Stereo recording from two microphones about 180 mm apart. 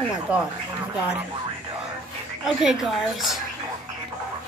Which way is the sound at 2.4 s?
Centre (ahead or behind).